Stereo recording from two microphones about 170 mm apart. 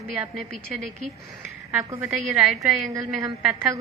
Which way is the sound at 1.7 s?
15° right (ahead or behind).